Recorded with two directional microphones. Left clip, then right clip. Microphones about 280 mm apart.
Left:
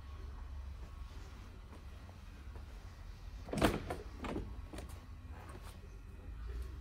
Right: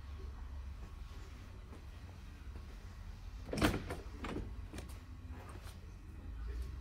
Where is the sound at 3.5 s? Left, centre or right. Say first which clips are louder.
Left 1 dB; left.